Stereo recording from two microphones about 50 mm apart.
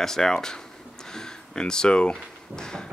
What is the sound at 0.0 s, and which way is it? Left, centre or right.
Speech, centre.